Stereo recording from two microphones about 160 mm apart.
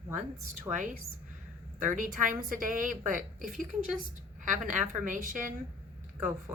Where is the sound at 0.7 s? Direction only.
15° right (ahead or behind).